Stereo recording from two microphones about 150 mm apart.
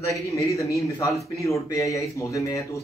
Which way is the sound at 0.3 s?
20° left (ahead or behind).